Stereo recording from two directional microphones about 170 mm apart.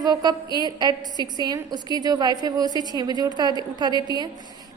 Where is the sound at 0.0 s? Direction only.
25° right (ahead or behind).